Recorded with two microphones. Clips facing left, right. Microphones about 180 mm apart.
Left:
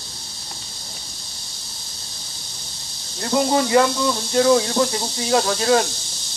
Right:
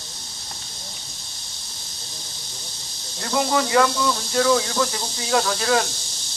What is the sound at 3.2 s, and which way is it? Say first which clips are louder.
Speech: left 3 dB; 30° left (ahead or behind).